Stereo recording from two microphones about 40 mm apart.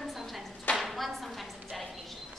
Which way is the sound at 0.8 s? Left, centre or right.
Centre.